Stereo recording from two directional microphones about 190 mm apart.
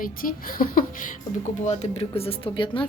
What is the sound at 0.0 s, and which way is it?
Speech, 50° left (ahead or behind).